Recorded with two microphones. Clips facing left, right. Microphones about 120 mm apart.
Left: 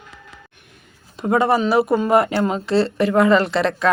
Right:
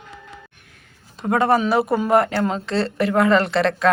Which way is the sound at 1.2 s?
5° left (ahead or behind).